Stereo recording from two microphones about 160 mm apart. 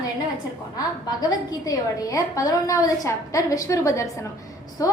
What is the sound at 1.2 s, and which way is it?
A woman's voice, 25° left (ahead or behind).